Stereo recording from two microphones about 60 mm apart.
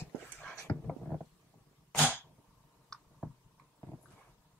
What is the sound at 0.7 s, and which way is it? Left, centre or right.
Cat, left.